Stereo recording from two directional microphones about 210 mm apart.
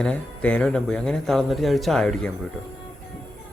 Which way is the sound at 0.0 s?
5° left (ahead or behind).